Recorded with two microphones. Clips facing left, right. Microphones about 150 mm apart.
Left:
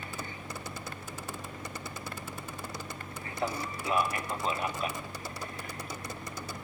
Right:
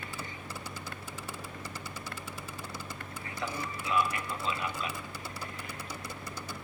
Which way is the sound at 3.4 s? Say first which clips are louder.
Left 4 dB; 40° left (ahead or behind).